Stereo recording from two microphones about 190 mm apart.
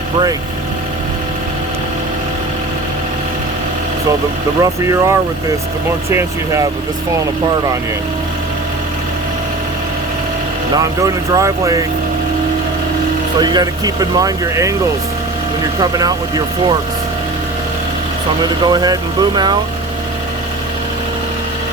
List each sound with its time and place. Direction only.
4.6 s speech: 15° right (ahead or behind)
10.8 s speech: 15° right (ahead or behind)
13.4 s speech: 20° right (ahead or behind)
15.8 s speech: 20° right (ahead or behind)
18.6 s speech: 20° right (ahead or behind)